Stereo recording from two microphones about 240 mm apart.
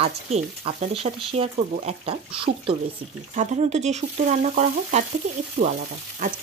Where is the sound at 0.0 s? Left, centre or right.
Right.